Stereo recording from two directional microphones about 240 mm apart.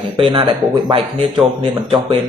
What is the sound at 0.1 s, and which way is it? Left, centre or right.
Speech, centre.